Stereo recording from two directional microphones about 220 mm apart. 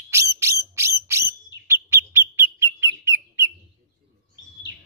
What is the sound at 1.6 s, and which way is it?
Bird, 10° right (ahead or behind).